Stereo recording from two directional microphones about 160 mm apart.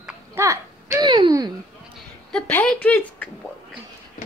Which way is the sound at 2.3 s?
5° left (ahead or behind).